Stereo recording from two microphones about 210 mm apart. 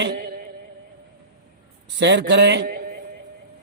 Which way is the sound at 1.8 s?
55° right (ahead or behind).